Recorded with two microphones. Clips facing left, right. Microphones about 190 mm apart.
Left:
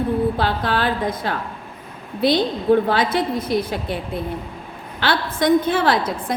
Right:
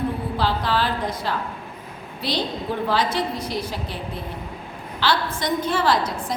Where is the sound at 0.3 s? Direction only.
55° left (ahead or behind).